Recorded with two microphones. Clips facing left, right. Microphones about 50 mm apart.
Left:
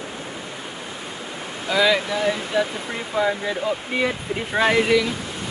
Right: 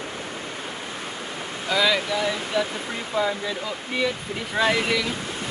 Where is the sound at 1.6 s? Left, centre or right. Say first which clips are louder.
Left 3 dB; centre.